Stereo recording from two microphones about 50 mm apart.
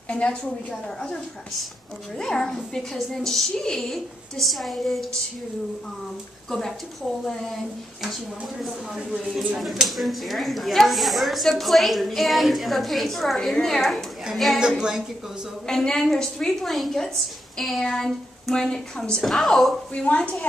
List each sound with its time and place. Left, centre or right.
0.1 s a woman's voice: left; by 5.0 s centre
8.1 s a woman's voice: centre
14.8 s a woman's voice: centre
15.6 s a woman's voice: centre
19.2 s a woman's voice: centre
20.1 s a woman's voice: left